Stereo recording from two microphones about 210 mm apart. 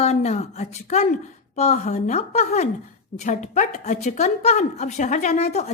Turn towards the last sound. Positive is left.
turn(degrees=30)  # may be behind; listen again after turning